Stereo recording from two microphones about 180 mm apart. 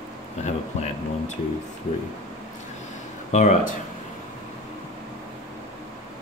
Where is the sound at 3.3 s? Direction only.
40° left (ahead or behind).